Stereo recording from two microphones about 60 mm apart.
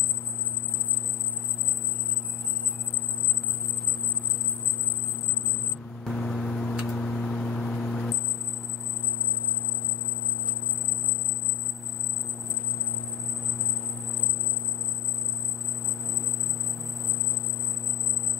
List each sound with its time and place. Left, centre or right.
6.0 s vehicle: centre
6.9 s a sound: centre
7.7 s vehicle: centre